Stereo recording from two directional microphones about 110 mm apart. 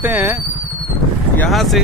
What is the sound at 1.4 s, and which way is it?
Speech, centre (ahead or behind).